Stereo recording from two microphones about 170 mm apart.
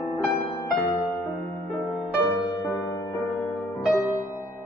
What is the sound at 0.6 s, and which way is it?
Music, 20° left (ahead or behind).